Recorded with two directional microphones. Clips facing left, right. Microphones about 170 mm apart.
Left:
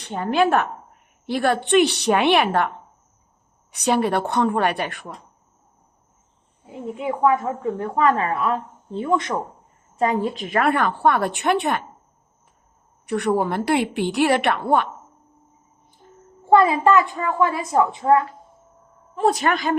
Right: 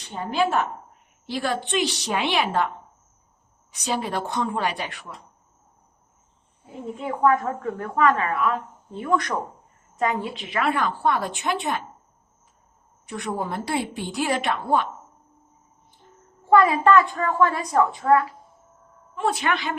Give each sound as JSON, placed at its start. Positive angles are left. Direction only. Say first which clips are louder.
{"t": 0.0, "sound": "a woman's voice", "louder": "left 4 dB", "side_deg": 60}
{"t": 7.1, "sound": "a woman's voice", "louder": "left 1 dB", "side_deg": 15}
{"t": 7.8, "sound": "a woman's voice", "louder": "left 1 dB", "side_deg": 30}
{"t": 10.0, "sound": "a woman's voice", "louder": "left 4 dB", "side_deg": 35}
{"t": 13.1, "sound": "a woman's voice", "louder": "left 8 dB", "side_deg": 65}
{"t": 16.5, "sound": "a sound", "louder": "left 2 dB", "side_deg": 25}
{"t": 16.9, "sound": "a woman's voice", "louder": "even", "side_deg": 20}
{"t": 19.1, "sound": "speech", "louder": "left 5 dB", "side_deg": 40}